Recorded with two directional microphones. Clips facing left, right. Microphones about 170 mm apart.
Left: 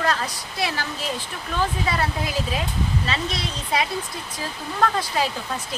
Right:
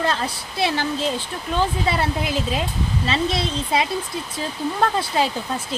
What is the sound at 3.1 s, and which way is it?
Speech, 25° right (ahead or behind).